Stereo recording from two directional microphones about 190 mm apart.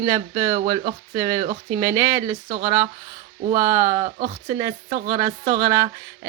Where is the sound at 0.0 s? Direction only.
15° right (ahead or behind).